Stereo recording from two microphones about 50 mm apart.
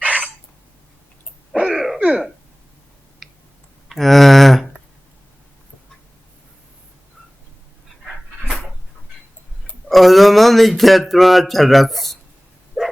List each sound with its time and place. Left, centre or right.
0.0 s a sound: right
1.7 s throat clearing: centre
2.0 s throat clearing: centre
3.2 s a sound: centre
9.9 s speech: centre
12.8 s dog: centre